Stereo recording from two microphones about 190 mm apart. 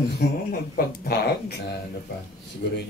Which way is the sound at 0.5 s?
50° left (ahead or behind).